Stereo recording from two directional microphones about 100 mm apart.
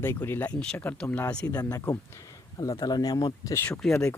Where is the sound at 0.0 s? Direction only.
20° left (ahead or behind).